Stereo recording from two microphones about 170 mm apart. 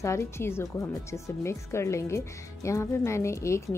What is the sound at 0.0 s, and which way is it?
A woman's voice, 15° left (ahead or behind).